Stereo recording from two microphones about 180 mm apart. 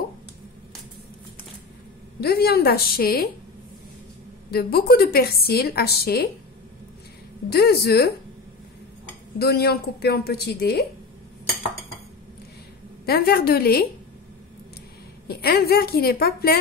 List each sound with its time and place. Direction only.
2.1 s a woman's voice: 60° left (ahead or behind)
4.5 s a woman's voice: 60° left (ahead or behind)
7.4 s a woman's voice: 60° left (ahead or behind)
9.4 s a woman's voice: 60° left (ahead or behind)
13.0 s a woman's voice: 60° left (ahead or behind)
15.2 s a woman's voice: 60° left (ahead or behind)